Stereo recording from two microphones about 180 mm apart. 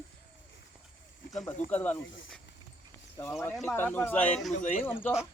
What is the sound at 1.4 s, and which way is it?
Speech, 10° left (ahead or behind).